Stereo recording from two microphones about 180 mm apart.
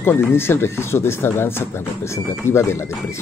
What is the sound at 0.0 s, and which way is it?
Speech, 10° left (ahead or behind).